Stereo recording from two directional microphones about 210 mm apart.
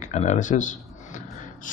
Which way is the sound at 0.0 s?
35° left (ahead or behind).